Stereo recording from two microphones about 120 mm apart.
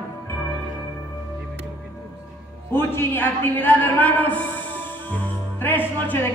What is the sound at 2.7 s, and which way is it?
A man's voice, 20° left (ahead or behind).